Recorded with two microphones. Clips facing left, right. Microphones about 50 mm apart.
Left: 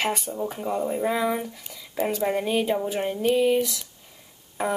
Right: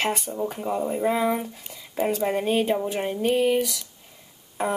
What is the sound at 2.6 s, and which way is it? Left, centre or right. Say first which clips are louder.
Speech: even; centre.